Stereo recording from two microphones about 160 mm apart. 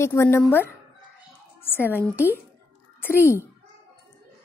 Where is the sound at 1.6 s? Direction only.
15° left (ahead or behind).